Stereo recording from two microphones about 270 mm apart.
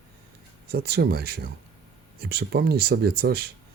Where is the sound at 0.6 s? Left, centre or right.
Right.